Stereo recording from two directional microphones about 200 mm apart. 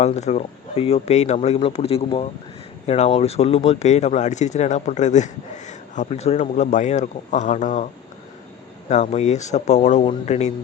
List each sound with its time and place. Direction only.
0.0 s speech: 35° left (ahead or behind)
8.9 s speech: 35° left (ahead or behind)